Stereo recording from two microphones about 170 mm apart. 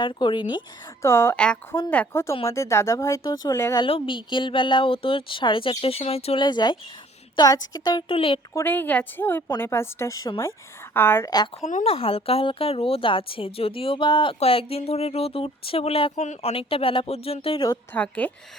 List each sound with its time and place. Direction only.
0.0 s speech: 30° left (ahead or behind)
1.0 s speech: 15° left (ahead or behind)
3.8 s speech: 30° left (ahead or behind)
8.5 s speech: 10° left (ahead or behind)
11.6 s speech: 45° left (ahead or behind)
17.9 s speech: 10° left (ahead or behind)